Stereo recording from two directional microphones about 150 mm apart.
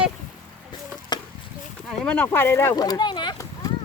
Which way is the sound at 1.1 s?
30° left (ahead or behind).